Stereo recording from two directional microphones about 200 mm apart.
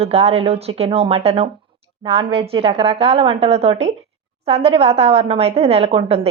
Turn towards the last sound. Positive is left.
turn(degrees=-30)  # may be behind; listen again after turning